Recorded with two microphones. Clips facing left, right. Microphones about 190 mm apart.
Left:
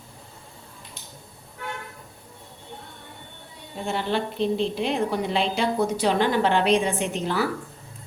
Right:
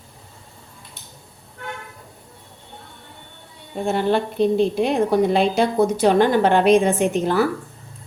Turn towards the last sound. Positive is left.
turn(degrees=-50)  # may be behind; listen again after turning